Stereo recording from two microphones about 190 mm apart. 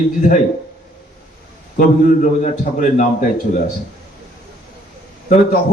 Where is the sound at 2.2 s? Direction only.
40° left (ahead or behind).